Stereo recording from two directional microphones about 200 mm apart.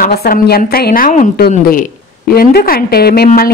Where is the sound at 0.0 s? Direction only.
50° left (ahead or behind).